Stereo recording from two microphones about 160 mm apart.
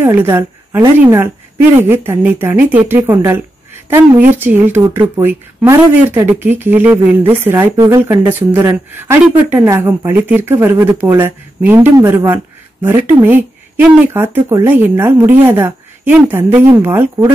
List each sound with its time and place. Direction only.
0.0 s speech: 15° right (ahead or behind)
4.4 s speech: 10° right (ahead or behind)